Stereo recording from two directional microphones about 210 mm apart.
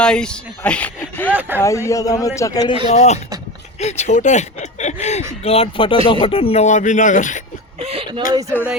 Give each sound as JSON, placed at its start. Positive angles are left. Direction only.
{"t": 0.0, "sound": "speech", "side_deg": 5}
{"t": 1.3, "sound": "speech", "side_deg": -10}
{"t": 1.6, "sound": "a man's voice", "side_deg": 15}
{"t": 2.8, "sound": "speech", "side_deg": 30}
{"t": 7.9, "sound": "speech", "side_deg": -25}
{"t": 8.3, "sound": "speech", "side_deg": -15}